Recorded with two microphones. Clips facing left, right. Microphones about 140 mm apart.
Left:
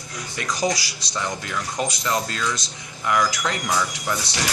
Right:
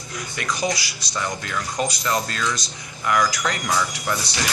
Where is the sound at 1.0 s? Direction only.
30° left (ahead or behind).